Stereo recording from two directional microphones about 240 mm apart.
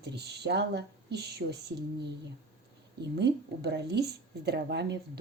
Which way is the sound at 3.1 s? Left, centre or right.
Right.